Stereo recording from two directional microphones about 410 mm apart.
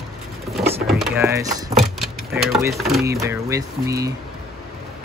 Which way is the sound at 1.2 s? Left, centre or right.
Centre.